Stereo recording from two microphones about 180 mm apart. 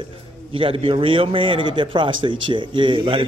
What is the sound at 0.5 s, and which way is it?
A man's voice, 30° right (ahead or behind).